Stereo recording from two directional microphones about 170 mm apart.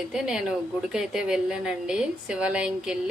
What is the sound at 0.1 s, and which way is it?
A woman's voice, 5° right (ahead or behind).